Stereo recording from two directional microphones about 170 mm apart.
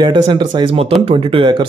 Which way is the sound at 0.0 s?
25° right (ahead or behind).